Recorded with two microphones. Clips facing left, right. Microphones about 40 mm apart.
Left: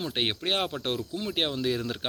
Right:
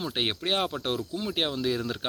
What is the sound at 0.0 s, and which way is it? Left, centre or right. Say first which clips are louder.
Speech: even; left.